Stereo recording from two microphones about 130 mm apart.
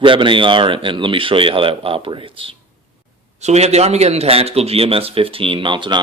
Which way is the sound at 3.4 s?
55° right (ahead or behind).